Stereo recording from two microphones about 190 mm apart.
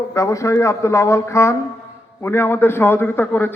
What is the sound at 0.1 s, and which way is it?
Speech, 15° left (ahead or behind).